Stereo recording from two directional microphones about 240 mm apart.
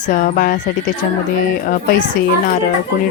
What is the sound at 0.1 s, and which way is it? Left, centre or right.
Speech, left.